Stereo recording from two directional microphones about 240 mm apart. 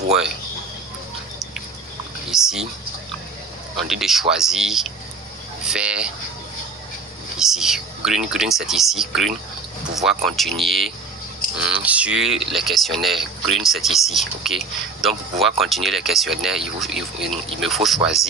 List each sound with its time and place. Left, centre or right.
2.3 s speech: centre
3.8 s speech: centre
7.3 s speech: centre